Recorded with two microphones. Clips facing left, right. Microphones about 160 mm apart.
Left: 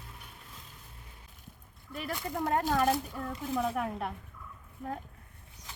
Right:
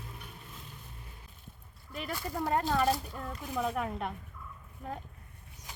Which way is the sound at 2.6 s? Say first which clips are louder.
Left 1 dB; 10° left (ahead or behind).